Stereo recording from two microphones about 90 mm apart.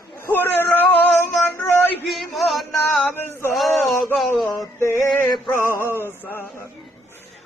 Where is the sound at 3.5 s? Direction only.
Centre (ahead or behind).